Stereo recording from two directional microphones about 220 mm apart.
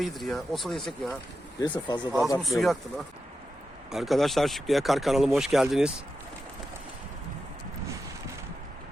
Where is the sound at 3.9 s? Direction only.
Centre (ahead or behind).